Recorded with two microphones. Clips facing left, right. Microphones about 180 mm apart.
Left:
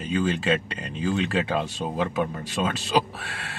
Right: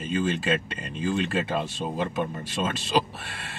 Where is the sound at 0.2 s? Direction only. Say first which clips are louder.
Left 2 dB; centre (ahead or behind).